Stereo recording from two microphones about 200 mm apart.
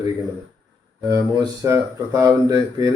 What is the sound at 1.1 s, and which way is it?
Speech, 15° right (ahead or behind).